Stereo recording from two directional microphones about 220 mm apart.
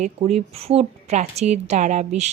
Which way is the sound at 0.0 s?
30° right (ahead or behind).